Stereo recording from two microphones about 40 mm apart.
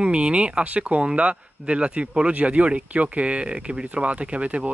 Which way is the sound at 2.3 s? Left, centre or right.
Right.